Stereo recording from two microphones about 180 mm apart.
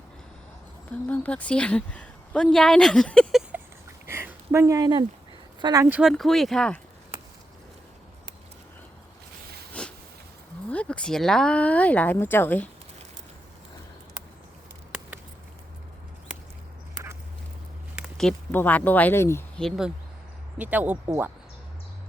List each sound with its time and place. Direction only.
1.0 s speech: 10° left (ahead or behind)
4.0 s a sound: 15° right (ahead or behind)
5.8 s speech: 5° right (ahead or behind)
9.8 s a sound: 5° left (ahead or behind)
10.7 s speech: 5° left (ahead or behind)
17.9 s speech: centre (ahead or behind)